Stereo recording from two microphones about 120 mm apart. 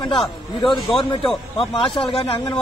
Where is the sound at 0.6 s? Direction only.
45° left (ahead or behind).